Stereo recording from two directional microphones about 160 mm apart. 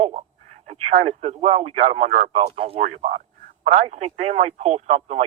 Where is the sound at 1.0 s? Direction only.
45° right (ahead or behind).